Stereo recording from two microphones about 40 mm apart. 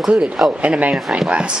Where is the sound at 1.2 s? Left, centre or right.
Right.